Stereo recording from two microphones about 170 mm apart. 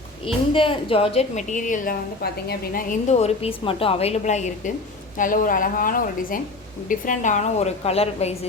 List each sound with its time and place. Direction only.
0.5 s a woman's voice: 30° left (ahead or behind)